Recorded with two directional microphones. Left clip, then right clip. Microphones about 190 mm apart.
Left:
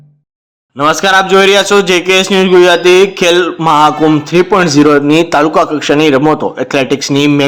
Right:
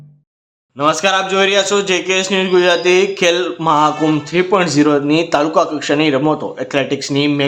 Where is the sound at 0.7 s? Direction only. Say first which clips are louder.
Left 6 dB; 30° left (ahead or behind).